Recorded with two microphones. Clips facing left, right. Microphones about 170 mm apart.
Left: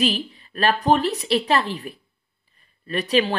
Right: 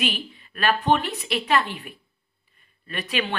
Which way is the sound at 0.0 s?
35° left (ahead or behind).